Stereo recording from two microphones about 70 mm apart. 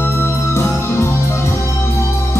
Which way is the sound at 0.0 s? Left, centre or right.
Left.